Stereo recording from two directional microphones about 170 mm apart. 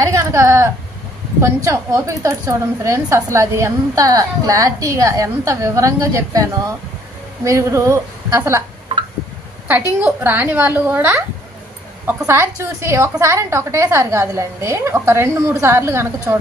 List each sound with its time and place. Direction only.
0.0 s a sound: 20° right (ahead or behind)
1.4 s a woman's voice: 15° right (ahead or behind)
7.4 s a woman's voice: 20° right (ahead or behind)
10.0 s a woman's voice: 10° right (ahead or behind)